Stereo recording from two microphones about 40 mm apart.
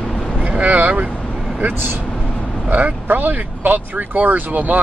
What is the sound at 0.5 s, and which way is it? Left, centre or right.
Vehicle, right.